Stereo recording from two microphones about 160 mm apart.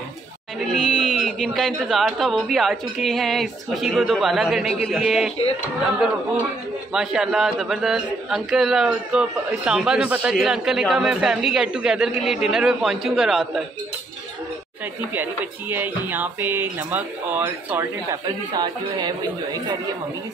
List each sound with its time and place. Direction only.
0.7 s a man's voice: 5° left (ahead or behind)
6.9 s a man's voice: 5° right (ahead or behind)
15.7 s speech: 10° right (ahead or behind)
18.5 s speech: 25° right (ahead or behind)